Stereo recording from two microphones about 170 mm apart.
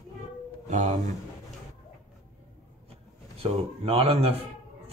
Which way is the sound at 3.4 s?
35° right (ahead or behind).